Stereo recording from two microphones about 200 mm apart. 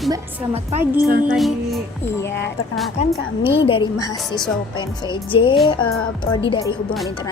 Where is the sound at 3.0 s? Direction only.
35° left (ahead or behind).